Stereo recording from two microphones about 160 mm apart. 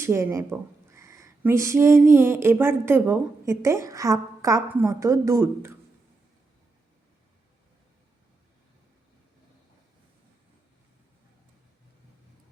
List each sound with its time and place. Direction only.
0.0 s speech: 15° right (ahead or behind)